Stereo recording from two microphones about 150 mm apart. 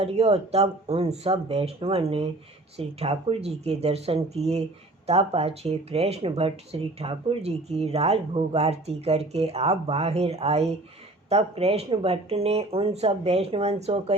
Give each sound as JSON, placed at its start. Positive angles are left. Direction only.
{"t": 0.0, "sound": "speech", "side_deg": -40}